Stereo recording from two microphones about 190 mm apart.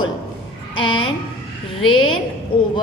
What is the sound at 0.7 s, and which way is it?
A woman's voice, 25° left (ahead or behind).